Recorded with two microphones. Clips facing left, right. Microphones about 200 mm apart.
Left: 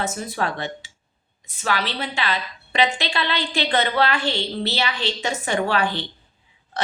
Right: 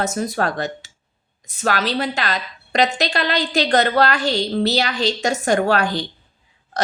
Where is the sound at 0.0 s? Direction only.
40° right (ahead or behind).